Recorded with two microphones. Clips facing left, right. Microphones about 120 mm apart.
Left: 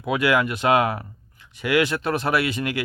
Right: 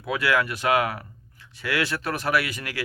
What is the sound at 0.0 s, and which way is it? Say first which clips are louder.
Speech: left 3 dB; 20° left (ahead or behind).